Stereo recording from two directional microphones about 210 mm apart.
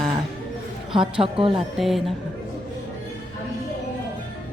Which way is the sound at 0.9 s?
25° right (ahead or behind).